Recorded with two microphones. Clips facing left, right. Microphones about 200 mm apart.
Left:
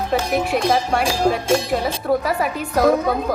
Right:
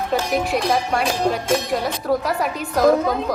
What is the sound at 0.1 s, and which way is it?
Speech, centre (ahead or behind).